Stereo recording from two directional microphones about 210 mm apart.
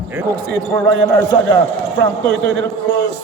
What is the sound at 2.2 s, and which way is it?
Speech, 65° right (ahead or behind).